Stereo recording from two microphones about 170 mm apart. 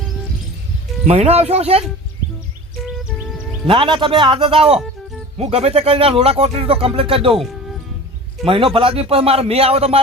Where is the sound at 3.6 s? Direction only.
30° right (ahead or behind).